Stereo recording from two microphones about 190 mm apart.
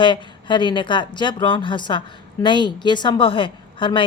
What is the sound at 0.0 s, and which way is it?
Speech, 25° left (ahead or behind).